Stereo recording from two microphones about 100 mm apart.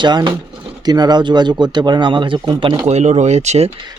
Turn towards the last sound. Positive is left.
turn(degrees=-90)